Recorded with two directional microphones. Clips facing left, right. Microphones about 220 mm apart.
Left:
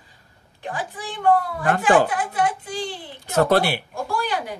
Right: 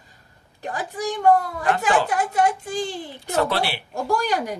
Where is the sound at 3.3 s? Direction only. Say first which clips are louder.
Left 4 dB; 45° left (ahead or behind).